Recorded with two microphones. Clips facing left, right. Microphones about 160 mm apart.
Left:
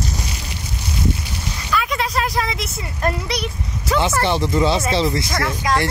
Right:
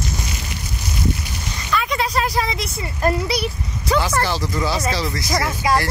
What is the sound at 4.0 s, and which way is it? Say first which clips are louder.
Speech: left 4 dB; 25° left (ahead or behind).